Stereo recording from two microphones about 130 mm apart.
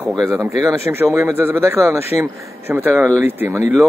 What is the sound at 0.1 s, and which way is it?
Speech, centre (ahead or behind).